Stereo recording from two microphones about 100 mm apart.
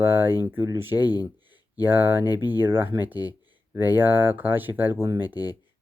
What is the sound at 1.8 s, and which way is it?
Speech, 20° right (ahead or behind).